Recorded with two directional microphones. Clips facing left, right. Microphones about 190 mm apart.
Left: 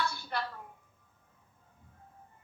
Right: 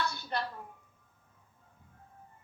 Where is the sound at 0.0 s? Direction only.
20° right (ahead or behind).